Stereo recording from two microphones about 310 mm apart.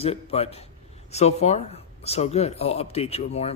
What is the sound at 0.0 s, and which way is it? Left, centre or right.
Speech, centre.